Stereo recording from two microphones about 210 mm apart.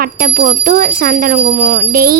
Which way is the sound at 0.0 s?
45° right (ahead or behind).